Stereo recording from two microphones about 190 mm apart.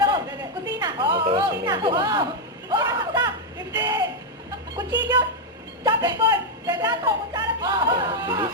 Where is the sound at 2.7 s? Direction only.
20° right (ahead or behind).